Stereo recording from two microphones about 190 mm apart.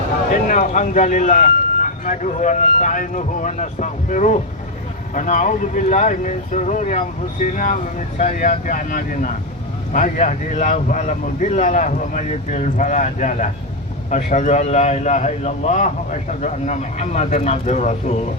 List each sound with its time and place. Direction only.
0.3 s speech: 45° left (ahead or behind)